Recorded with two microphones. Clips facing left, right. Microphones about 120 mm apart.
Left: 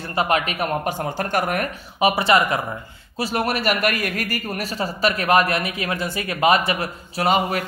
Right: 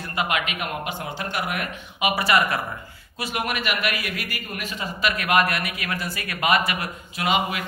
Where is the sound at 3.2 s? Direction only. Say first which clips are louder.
Left 5 dB; 35° left (ahead or behind).